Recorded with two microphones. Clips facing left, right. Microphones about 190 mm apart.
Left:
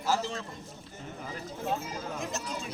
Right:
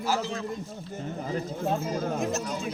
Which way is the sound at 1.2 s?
45° right (ahead or behind).